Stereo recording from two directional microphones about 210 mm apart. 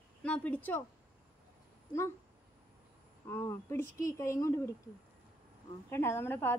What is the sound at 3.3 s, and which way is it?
A woman's voice, 10° left (ahead or behind).